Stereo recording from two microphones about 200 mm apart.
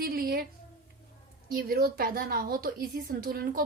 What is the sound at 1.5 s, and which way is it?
A woman's voice, 50° right (ahead or behind).